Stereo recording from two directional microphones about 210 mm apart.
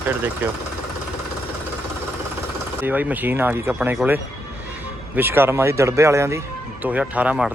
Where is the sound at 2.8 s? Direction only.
10° right (ahead or behind).